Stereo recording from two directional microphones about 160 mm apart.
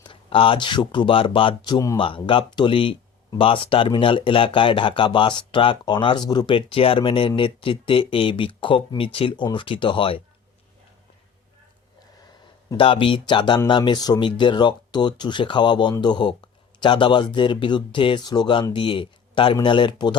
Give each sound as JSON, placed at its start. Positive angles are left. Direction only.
{"t": 0.0, "sound": "speech", "side_deg": 35}
{"t": 12.7, "sound": "speech", "side_deg": 35}